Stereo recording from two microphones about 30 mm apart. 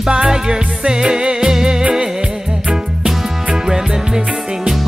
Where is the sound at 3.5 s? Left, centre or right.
Centre.